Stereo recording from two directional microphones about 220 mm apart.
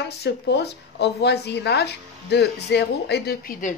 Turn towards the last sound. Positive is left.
turn(degrees=45)  # may be behind; listen again after turning